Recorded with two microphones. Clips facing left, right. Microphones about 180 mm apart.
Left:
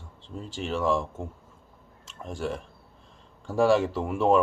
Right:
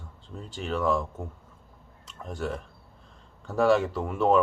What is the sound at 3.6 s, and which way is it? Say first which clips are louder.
Speech: left 1 dB; 5° left (ahead or behind).